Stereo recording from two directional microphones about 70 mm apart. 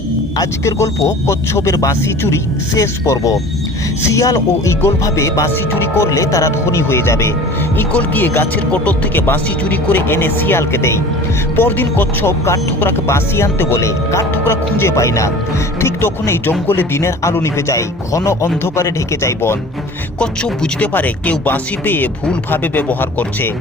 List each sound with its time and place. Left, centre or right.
1.0 s speech: left
4.8 s speech: left
7.9 s speech: left
15.8 s speech: left
20.1 s speech: centre